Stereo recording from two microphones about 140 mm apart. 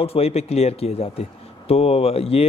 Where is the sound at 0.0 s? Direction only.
45° left (ahead or behind).